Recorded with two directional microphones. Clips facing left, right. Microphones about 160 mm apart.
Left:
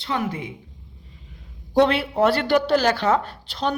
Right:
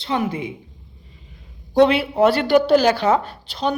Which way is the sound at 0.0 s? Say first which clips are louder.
Right 3 dB; 20° right (ahead or behind).